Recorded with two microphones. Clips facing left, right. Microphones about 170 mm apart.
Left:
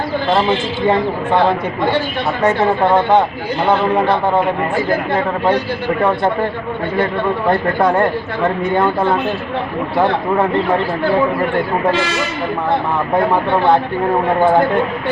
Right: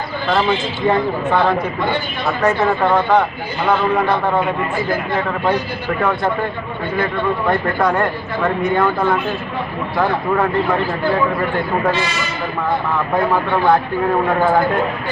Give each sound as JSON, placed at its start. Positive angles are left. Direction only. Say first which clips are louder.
{"t": 0.9, "sound": "speech", "louder": "left 1 dB", "side_deg": 25}
{"t": 2.9, "sound": "speech", "louder": "left 2 dB", "side_deg": 25}
{"t": 6.0, "sound": "speech", "louder": "left 2 dB", "side_deg": 30}
{"t": 7.8, "sound": "speech", "louder": "left 3 dB", "side_deg": 30}